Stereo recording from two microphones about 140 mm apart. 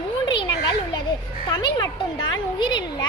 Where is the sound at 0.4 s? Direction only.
30° left (ahead or behind).